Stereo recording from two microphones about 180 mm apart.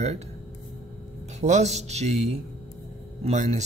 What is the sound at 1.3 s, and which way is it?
A man's voice, 40° right (ahead or behind).